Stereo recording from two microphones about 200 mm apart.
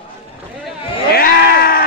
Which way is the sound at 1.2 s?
50° left (ahead or behind).